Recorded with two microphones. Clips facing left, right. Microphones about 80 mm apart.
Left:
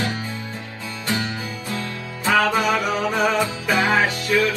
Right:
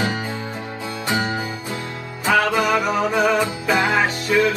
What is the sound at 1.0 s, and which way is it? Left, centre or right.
Music, right.